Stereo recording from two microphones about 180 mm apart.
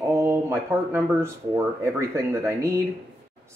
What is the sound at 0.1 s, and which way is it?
Speech, 15° right (ahead or behind).